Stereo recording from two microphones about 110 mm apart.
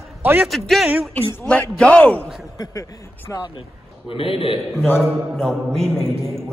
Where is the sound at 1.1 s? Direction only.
10° left (ahead or behind).